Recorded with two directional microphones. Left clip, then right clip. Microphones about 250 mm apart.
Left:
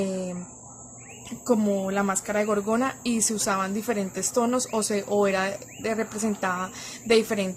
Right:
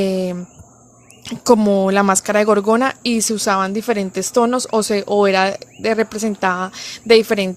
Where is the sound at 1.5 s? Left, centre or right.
Right.